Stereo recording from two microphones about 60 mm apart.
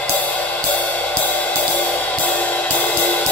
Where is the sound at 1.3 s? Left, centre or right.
Left.